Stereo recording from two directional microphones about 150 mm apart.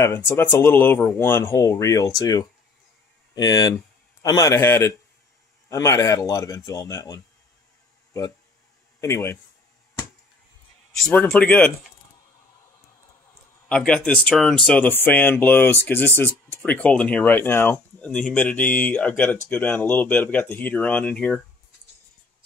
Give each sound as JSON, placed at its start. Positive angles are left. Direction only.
{"t": 0.0, "sound": "speech", "side_deg": 20}
{"t": 9.0, "sound": "speech", "side_deg": 20}
{"t": 10.9, "sound": "speech", "side_deg": 5}
{"t": 13.7, "sound": "speech", "side_deg": 5}